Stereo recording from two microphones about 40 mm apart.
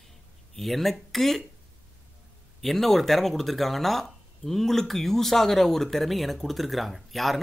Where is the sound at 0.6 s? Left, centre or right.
Centre.